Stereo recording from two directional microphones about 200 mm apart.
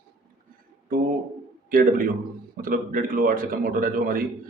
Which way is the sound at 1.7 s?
45° right (ahead or behind).